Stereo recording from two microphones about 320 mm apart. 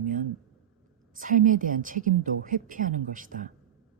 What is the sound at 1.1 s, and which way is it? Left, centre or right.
A woman's voice, right.